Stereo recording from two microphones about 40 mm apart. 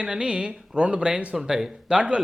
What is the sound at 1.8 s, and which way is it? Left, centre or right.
Speech, right.